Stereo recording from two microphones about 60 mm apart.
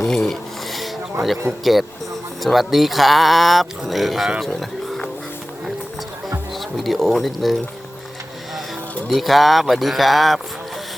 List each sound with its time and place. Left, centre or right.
0.0 s a sound: centre
1.5 s speech: right
2.4 s speech: centre
6.5 s speech: centre
9.0 s speech: centre